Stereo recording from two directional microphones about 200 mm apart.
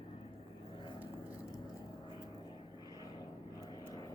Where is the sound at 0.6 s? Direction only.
25° left (ahead or behind).